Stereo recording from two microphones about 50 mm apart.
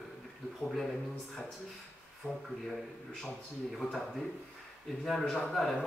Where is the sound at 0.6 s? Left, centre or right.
Centre.